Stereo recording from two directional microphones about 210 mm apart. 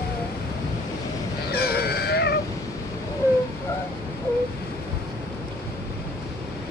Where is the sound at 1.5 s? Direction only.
50° left (ahead or behind).